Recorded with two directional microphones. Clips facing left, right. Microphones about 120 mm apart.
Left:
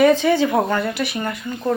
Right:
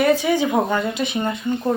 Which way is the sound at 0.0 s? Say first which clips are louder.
Left 3 dB; 10° right (ahead or behind).